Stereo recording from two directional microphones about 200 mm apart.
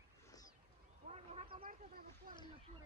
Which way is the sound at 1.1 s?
30° right (ahead or behind).